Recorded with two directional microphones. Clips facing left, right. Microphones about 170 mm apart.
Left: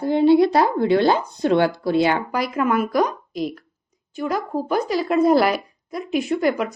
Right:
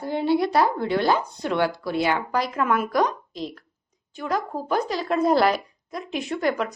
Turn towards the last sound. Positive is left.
turn(degrees=10)  # may be behind; listen again after turning